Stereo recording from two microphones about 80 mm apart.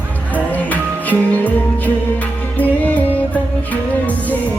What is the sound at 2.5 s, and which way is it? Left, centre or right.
Music, centre.